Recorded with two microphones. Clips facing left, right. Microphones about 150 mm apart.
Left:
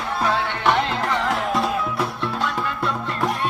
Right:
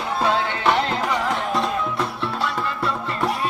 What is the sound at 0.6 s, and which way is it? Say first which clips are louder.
Music: left 1 dB; 5° right (ahead or behind).